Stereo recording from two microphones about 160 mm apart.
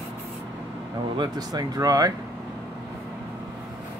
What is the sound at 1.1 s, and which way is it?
Speech, 25° right (ahead or behind).